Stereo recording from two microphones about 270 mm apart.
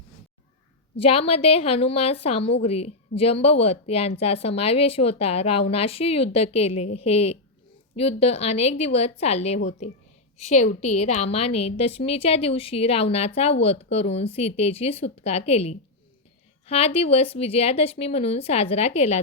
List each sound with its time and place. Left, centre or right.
1.0 s a woman's voice: left